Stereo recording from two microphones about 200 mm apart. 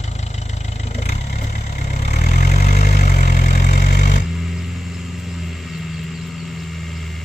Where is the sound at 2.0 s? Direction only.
35° left (ahead or behind).